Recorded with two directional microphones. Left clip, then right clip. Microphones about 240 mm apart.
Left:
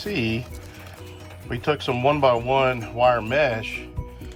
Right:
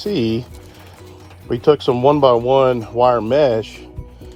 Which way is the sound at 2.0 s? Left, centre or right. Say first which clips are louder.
Right 6 dB; right.